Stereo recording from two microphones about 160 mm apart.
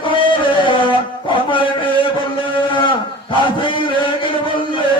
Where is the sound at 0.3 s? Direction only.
30° left (ahead or behind).